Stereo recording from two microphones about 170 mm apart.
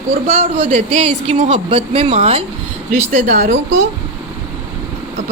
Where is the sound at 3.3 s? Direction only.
50° right (ahead or behind).